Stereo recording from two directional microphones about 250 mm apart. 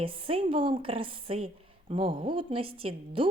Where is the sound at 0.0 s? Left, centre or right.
Right.